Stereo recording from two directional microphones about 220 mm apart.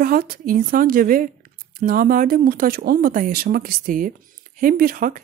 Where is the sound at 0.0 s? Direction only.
40° right (ahead or behind).